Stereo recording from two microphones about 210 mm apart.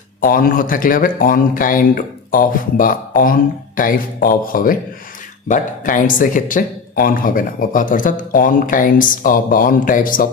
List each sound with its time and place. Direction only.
0.2 s speech: 40° left (ahead or behind)